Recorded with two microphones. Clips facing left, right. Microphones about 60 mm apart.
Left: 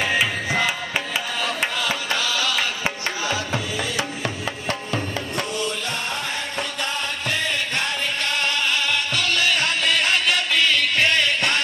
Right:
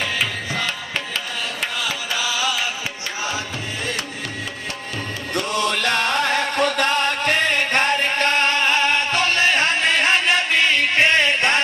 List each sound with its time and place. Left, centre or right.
0.2 s music: centre
1.8 s music: centre
5.5 s music: right